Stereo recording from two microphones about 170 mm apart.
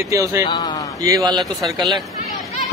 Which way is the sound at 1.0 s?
20° right (ahead or behind).